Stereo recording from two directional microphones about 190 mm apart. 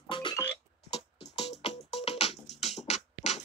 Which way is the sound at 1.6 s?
35° left (ahead or behind).